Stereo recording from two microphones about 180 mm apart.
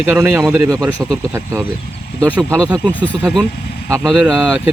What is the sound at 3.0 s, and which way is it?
Speech, 5° left (ahead or behind).